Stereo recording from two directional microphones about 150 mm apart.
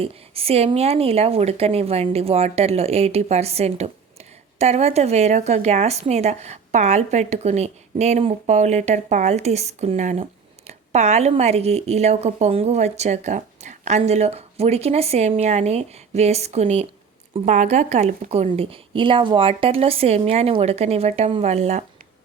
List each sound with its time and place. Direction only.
0.0 s a woman's voice: 40° right (ahead or behind)